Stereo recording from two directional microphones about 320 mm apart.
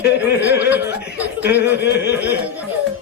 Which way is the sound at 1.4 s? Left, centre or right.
Left.